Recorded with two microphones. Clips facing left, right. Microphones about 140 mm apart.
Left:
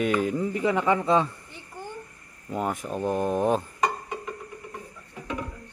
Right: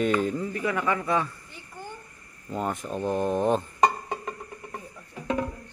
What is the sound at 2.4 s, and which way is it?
Speech, 5° left (ahead or behind).